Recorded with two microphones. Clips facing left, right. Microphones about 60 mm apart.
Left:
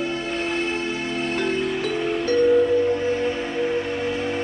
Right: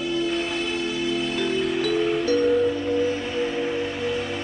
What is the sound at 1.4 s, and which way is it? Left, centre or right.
Music, left.